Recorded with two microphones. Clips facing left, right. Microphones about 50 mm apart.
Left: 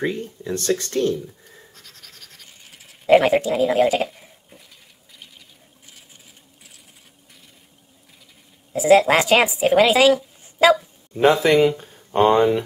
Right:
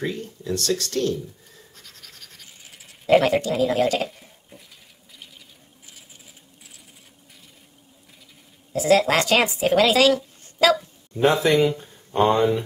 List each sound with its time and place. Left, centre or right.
0.4 s speech: left
1.1 s a sound: centre
1.7 s scratch: centre
3.1 s speech: centre
5.9 s a sound: centre
8.7 s a woman's voice: centre